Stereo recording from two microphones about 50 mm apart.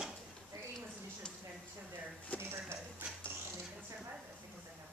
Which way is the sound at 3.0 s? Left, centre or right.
Right.